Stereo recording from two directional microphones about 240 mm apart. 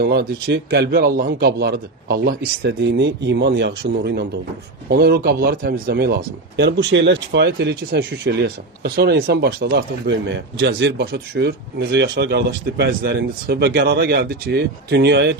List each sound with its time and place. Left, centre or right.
0.0 s speech: right